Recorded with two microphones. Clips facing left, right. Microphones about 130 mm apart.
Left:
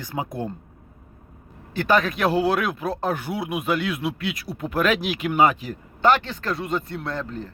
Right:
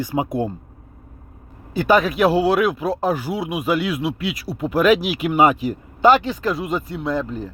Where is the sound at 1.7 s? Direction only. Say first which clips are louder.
Right 4 dB; 10° right (ahead or behind).